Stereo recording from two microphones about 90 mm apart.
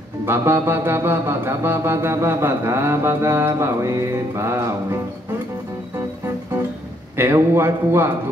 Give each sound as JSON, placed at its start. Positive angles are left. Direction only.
{"t": 0.2, "sound": "music", "side_deg": -25}
{"t": 7.2, "sound": "music", "side_deg": -30}